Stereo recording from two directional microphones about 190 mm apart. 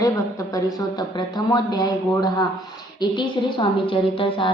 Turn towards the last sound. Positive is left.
turn(degrees=25)  # may be behind; listen again after turning